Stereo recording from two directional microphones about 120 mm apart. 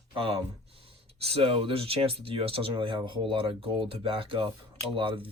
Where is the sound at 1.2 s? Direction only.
55° right (ahead or behind).